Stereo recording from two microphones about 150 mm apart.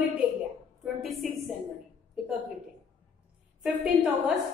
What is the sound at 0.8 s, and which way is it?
Speech, centre (ahead or behind).